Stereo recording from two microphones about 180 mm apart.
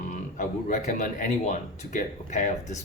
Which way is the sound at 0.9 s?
45° left (ahead or behind).